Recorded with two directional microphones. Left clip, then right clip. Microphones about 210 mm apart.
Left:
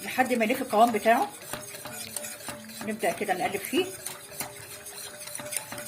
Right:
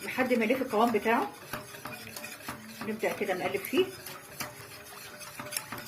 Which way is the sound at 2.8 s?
40° left (ahead or behind).